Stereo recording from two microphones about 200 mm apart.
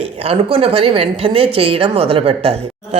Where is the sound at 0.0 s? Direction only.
30° right (ahead or behind).